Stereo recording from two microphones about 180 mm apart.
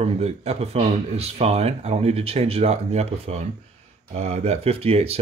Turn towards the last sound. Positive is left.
turn(degrees=-35)  # may be behind; listen again after turning